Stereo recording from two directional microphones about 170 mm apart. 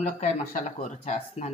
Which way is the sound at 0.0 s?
50° left (ahead or behind).